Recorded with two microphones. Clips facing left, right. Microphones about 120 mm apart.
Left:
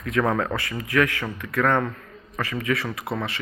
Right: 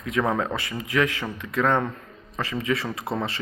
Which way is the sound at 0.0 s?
20° right (ahead or behind).